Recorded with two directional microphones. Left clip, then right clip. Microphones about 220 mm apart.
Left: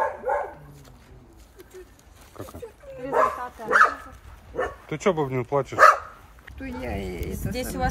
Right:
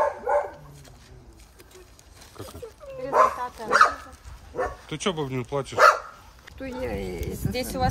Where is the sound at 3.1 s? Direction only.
35° right (ahead or behind).